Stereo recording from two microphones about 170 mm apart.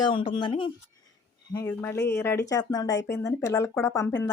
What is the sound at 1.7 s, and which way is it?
A woman's voice, 10° left (ahead or behind).